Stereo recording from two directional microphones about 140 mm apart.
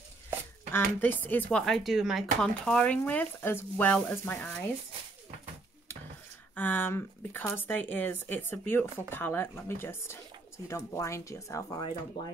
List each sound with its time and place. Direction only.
0.7 s speech: 15° left (ahead or behind)
1.6 s speech: centre (ahead or behind)
6.5 s speech: 15° left (ahead or behind)